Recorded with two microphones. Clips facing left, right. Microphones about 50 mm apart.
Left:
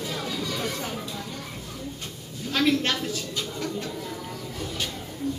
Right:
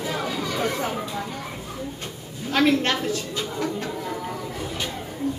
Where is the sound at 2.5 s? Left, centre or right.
Centre.